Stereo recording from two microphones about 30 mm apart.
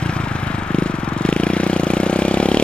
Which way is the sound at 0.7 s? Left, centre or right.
Left.